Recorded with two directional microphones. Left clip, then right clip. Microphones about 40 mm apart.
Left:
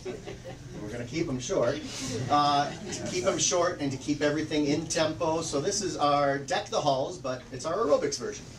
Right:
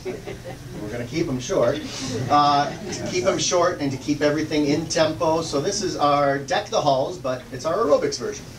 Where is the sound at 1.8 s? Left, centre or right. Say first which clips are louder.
Right 6 dB; left.